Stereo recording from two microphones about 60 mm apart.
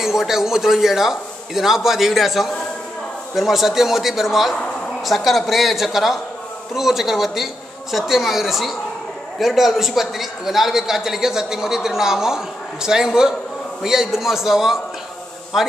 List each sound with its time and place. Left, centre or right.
0.0 s a man's voice: centre